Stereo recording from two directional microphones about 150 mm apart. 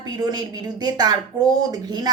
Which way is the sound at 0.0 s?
25° right (ahead or behind).